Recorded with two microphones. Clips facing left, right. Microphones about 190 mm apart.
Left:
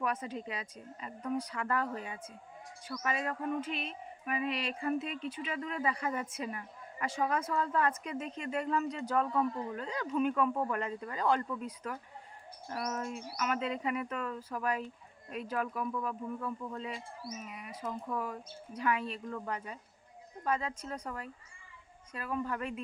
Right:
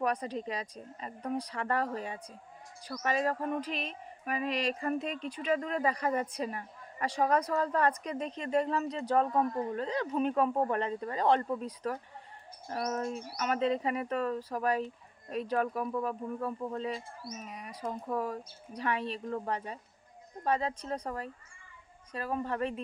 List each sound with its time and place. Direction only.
0.0 s speech: 35° right (ahead or behind)
5.2 s speech: 5° left (ahead or behind)
5.5 s speech: 45° right (ahead or behind)